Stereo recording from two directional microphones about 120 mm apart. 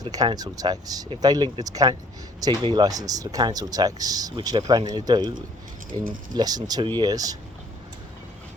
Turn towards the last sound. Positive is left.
turn(degrees=-30)  # may be behind; listen again after turning